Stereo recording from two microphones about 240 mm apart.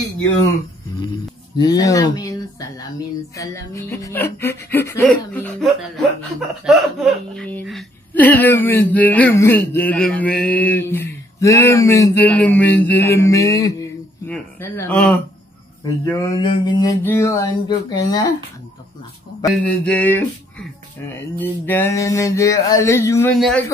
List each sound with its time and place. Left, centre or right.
1.6 s speech: centre
3.3 s speech: centre
15.8 s speech: centre
19.5 s speech: centre